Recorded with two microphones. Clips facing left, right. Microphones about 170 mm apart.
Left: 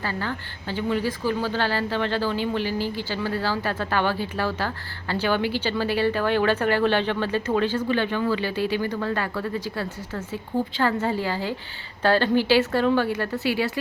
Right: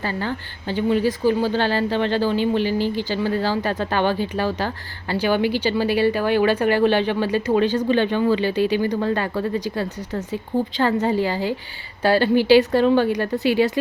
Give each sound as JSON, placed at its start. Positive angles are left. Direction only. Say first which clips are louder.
{"t": 0.0, "sound": "a woman's voice", "louder": "right 3 dB", "side_deg": -20}